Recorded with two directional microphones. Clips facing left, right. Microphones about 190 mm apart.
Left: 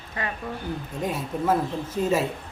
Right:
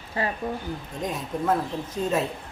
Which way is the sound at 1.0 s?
5° left (ahead or behind).